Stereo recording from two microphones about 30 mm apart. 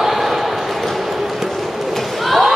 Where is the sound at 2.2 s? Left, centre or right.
Centre.